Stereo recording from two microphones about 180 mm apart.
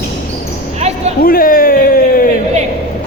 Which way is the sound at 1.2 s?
55° left (ahead or behind).